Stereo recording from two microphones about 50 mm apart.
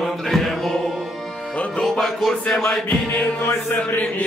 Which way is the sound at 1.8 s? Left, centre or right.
Centre.